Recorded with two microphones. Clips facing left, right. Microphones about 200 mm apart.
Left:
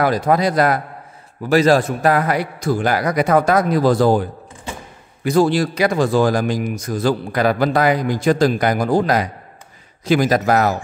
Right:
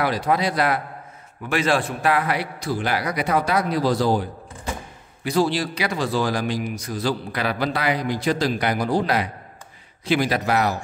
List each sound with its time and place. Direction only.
0.0 s a man's voice: 45° left (ahead or behind)